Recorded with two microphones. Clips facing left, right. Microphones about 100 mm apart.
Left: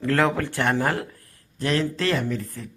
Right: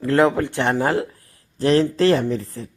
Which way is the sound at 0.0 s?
15° right (ahead or behind).